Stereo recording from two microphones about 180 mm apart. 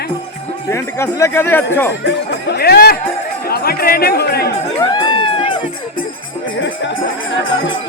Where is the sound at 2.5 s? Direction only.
60° left (ahead or behind).